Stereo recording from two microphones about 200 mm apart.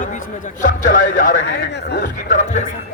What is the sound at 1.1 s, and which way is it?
Speech, 40° left (ahead or behind).